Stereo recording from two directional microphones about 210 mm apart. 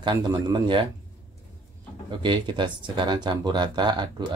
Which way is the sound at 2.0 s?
20° right (ahead or behind).